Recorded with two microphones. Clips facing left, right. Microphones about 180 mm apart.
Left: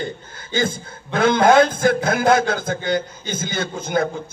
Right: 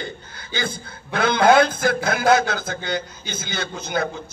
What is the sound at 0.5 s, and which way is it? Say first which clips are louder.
A man's voice: left 6 dB; 45° left (ahead or behind).